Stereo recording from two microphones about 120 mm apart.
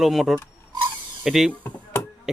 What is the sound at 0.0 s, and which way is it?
Speech, centre (ahead or behind).